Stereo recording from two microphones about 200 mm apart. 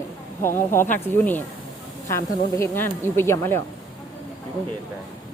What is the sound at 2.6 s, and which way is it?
A woman's voice, 10° left (ahead or behind).